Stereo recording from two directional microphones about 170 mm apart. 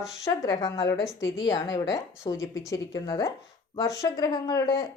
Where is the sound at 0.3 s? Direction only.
20° left (ahead or behind).